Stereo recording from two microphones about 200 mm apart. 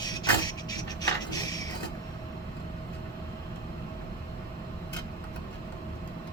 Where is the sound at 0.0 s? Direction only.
20° left (ahead or behind).